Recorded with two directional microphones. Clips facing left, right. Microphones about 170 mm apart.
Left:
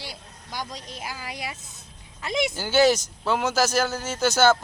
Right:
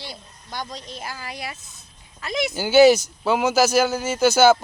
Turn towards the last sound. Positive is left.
turn(degrees=-5)  # may be behind; listen again after turning